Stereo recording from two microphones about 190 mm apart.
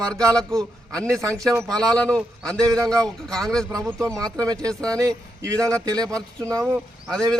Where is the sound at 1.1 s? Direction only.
15° right (ahead or behind).